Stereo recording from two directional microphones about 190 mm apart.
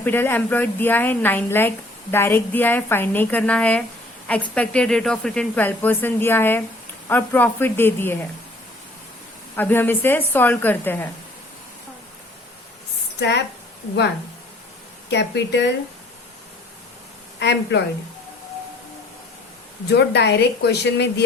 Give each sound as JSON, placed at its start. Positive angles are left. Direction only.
{"t": 0.0, "sound": "speech", "side_deg": 10}
{"t": 9.6, "sound": "speech", "side_deg": 10}
{"t": 13.1, "sound": "a woman's voice", "side_deg": 65}
{"t": 15.1, "sound": "speech", "side_deg": 65}
{"t": 17.4, "sound": "speech", "side_deg": 65}
{"t": 19.9, "sound": "speech", "side_deg": 65}